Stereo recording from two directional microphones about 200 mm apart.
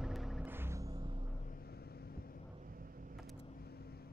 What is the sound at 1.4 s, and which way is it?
Vehicle, 50° left (ahead or behind).